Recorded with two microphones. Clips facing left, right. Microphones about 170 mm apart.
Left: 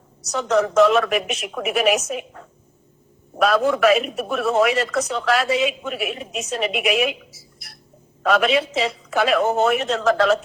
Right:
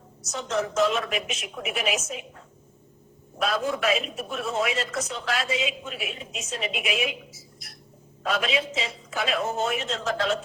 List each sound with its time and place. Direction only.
0.2 s a man's voice: 70° left (ahead or behind)